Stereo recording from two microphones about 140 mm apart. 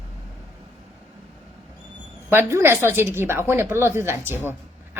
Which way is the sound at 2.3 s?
15° right (ahead or behind).